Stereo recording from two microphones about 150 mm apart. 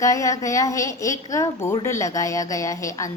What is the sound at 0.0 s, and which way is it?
A woman's voice, 20° left (ahead or behind).